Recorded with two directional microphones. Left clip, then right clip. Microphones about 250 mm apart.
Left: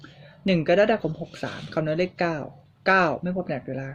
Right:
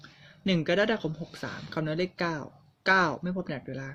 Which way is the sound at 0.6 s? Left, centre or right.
Centre.